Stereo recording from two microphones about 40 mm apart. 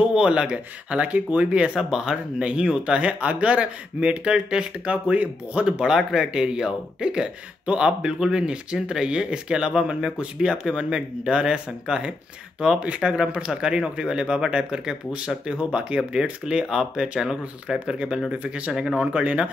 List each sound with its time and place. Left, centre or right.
0.1 s speech: right
5.9 s speech: centre
13.5 s speech: centre
19.1 s speech: right